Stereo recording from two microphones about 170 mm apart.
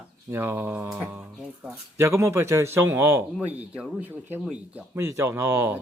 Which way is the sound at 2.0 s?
15° right (ahead or behind).